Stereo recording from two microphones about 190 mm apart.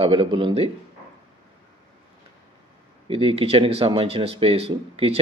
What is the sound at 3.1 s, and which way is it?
Speech, 30° right (ahead or behind).